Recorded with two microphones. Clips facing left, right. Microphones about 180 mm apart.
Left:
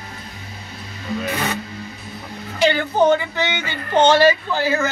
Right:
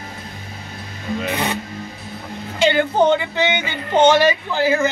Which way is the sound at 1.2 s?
20° right (ahead or behind).